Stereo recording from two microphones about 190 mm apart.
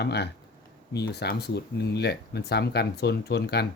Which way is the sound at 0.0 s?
60° left (ahead or behind).